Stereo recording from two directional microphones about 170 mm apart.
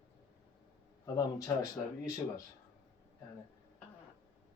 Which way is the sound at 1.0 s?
20° left (ahead or behind).